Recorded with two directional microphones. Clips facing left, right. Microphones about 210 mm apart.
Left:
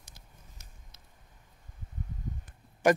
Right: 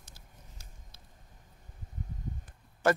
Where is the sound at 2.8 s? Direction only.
15° left (ahead or behind).